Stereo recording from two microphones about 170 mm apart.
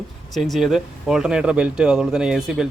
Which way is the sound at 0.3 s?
Centre (ahead or behind).